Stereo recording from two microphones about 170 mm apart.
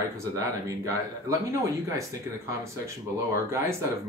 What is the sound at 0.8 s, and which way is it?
Speech, 20° right (ahead or behind).